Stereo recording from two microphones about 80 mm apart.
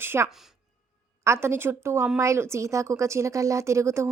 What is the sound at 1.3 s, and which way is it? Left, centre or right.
A woman's voice, right.